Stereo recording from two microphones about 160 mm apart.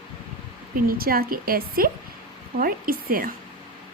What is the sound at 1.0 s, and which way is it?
A woman's voice, 70° right (ahead or behind).